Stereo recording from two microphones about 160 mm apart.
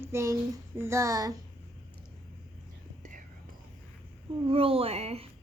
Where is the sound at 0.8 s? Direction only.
20° right (ahead or behind).